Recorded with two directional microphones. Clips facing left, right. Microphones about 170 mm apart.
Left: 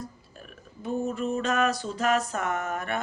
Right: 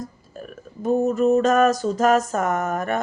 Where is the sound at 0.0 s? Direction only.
45° right (ahead or behind).